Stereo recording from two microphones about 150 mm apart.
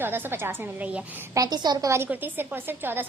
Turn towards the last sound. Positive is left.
turn(degrees=-15)  # may be behind; listen again after turning